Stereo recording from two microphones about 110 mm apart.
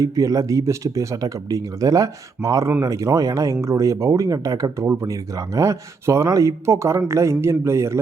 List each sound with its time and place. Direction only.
0.0 s speech: 30° right (ahead or behind)